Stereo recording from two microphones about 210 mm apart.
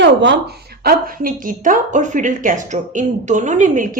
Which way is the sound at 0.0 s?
60° right (ahead or behind).